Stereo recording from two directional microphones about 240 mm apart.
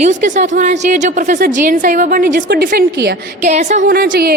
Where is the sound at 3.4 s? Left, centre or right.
Right.